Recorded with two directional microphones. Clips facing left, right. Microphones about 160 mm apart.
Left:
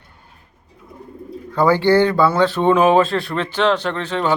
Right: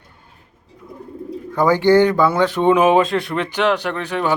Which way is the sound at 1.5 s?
15° right (ahead or behind).